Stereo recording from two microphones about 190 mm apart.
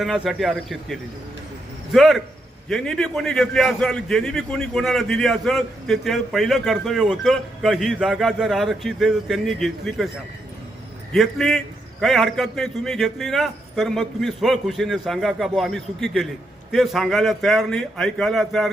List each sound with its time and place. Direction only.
0.0 s a man's voice: centre (ahead or behind)
11.1 s a man's voice: centre (ahead or behind)